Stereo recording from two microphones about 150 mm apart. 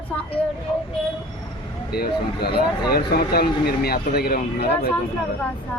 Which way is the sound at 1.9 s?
90° left.